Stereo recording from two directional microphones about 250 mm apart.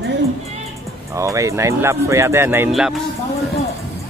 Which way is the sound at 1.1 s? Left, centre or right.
Centre.